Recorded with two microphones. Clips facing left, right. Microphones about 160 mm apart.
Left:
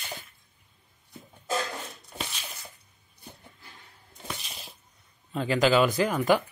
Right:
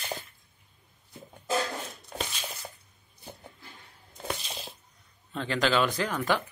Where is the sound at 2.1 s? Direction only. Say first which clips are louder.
Right 3 dB; 90° right.